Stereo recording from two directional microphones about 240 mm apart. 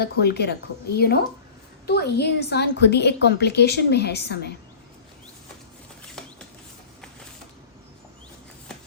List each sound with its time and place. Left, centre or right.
0.0 s a woman's voice: left